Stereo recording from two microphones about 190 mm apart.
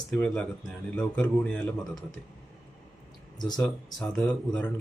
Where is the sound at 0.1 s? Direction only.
5° left (ahead or behind).